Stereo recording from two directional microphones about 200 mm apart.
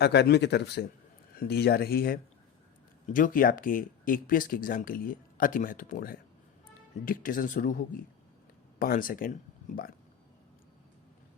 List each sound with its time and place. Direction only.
0.0 s speech: 55° left (ahead or behind)